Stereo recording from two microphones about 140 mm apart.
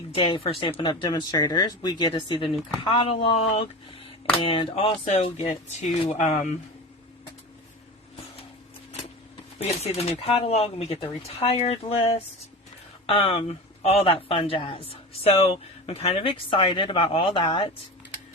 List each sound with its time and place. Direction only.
0.2 s speech: 40° left (ahead or behind); by 6.5 s 60° left (ahead or behind)
9.6 s speech: 50° left (ahead or behind)